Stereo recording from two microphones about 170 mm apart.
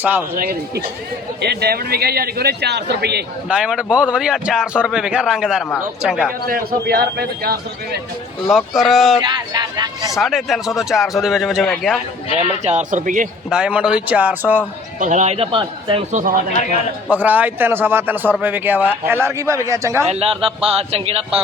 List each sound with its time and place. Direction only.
0.0 s a man's voice: 10° right (ahead or behind)
0.3 s a man's voice: 60° right (ahead or behind)
1.4 s a man's voice: 70° right (ahead or behind)
3.5 s a man's voice: 5° right (ahead or behind)
6.5 s a man's voice: 65° right (ahead or behind)
8.4 s a man's voice: centre (ahead or behind)
9.2 s speech: 25° right (ahead or behind)
10.2 s a man's voice: centre (ahead or behind)
12.4 s speech: 45° right (ahead or behind)
13.5 s a man's voice: 5° right (ahead or behind)
14.9 s a man's voice: 45° right (ahead or behind); by 16.0 s 30° right (ahead or behind)
16.1 s speech: 55° right (ahead or behind)
17.1 s a man's voice: 10° right (ahead or behind)
20.1 s a man's voice: 35° right (ahead or behind)